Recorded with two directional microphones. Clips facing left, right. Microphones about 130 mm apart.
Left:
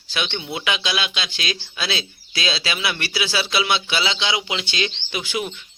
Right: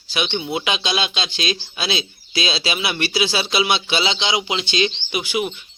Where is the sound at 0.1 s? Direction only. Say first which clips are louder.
Right 4 dB; 15° right (ahead or behind).